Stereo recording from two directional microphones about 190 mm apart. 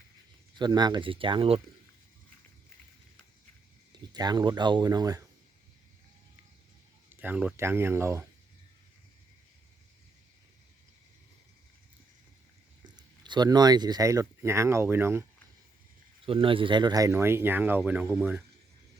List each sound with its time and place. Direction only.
0.6 s speech: 20° right (ahead or behind)
3.9 s speech: 20° right (ahead or behind)
7.2 s speech: 5° right (ahead or behind)
12.8 s speech: 25° right (ahead or behind)
16.2 s speech: 30° right (ahead or behind); by 18.4 s 10° right (ahead or behind)